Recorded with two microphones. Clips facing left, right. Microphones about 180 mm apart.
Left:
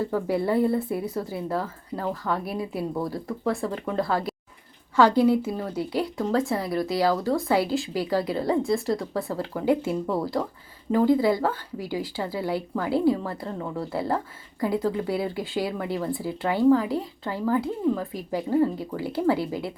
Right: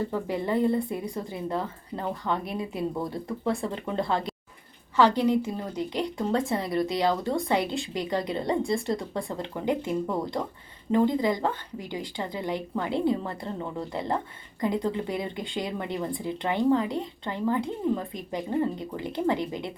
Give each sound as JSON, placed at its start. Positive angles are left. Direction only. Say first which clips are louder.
{"t": 0.1, "sound": "a woman's voice", "louder": "left 4 dB", "side_deg": 10}
{"t": 2.0, "sound": "speech", "louder": "left 2 dB", "side_deg": -20}
{"t": 2.5, "sound": "speech", "louder": "left 1 dB", "side_deg": 5}
{"t": 4.9, "sound": "a woman's voice", "louder": "left 3 dB", "side_deg": 10}